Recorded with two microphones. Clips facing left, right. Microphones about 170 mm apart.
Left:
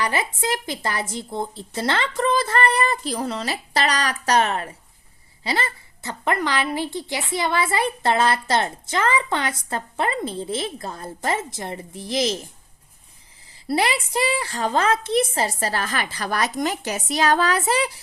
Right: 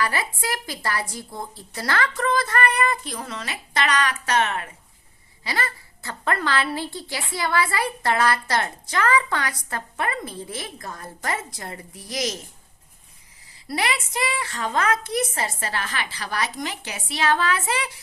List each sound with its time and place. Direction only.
0.0 s a woman's voice: 20° left (ahead or behind)
13.7 s a woman's voice: 30° left (ahead or behind)